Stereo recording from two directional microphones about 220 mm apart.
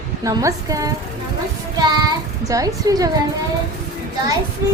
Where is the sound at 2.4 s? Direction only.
15° right (ahead or behind).